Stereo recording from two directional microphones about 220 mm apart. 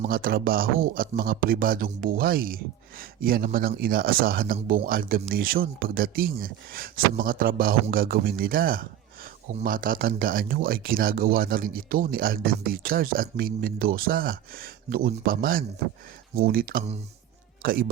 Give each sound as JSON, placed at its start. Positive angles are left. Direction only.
{"t": 0.0, "sound": "speech", "side_deg": -40}